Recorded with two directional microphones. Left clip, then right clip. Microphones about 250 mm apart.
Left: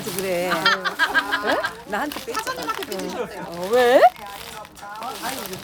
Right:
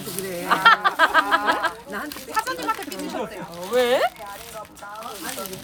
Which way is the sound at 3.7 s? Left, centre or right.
Left.